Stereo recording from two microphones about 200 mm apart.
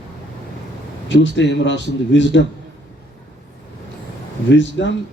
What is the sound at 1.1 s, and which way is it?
A man's voice, 65° left (ahead or behind).